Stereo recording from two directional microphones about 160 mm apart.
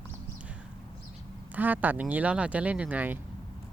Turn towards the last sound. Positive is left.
turn(degrees=-10)  # may be behind; listen again after turning